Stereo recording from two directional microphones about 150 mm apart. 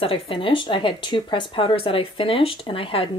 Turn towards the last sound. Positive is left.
turn(degrees=35)  # may be behind; listen again after turning